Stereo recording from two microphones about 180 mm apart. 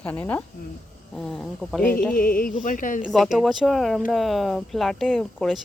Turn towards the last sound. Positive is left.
turn(degrees=0)  # may be behind; listen again after turning